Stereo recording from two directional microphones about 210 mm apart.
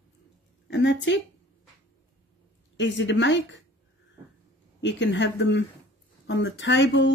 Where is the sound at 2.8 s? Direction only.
60° left (ahead or behind).